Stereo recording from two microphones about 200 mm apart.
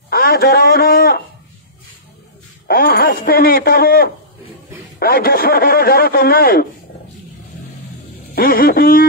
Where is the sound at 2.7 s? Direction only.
50° left (ahead or behind).